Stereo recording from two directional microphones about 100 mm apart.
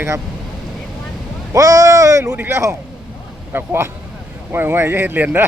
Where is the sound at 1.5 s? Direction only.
35° right (ahead or behind).